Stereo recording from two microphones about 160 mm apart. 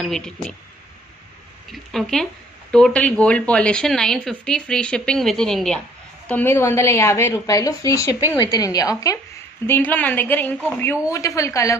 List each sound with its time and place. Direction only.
0.0 s speech: 5° left (ahead or behind)
1.7 s a woman's voice: centre (ahead or behind); by 11.8 s 20° left (ahead or behind)